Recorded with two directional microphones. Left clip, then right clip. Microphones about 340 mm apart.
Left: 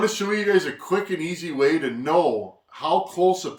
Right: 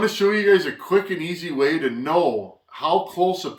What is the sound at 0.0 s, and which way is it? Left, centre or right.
Speech, centre.